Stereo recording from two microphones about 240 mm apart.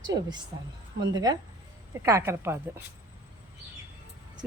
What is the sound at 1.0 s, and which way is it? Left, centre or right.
A woman's voice, centre.